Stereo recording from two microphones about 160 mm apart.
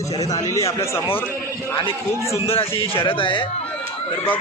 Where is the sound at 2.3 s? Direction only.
15° left (ahead or behind).